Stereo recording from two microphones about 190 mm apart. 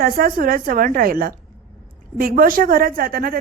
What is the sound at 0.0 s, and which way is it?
A woman's voice, 50° right (ahead or behind).